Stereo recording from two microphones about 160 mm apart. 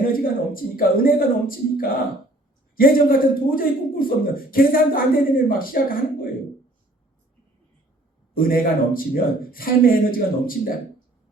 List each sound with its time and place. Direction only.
0.1 s speech: 65° left (ahead or behind)
8.3 s speech: 65° left (ahead or behind)